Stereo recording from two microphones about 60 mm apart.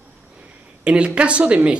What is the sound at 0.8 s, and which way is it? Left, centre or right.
Speech, centre.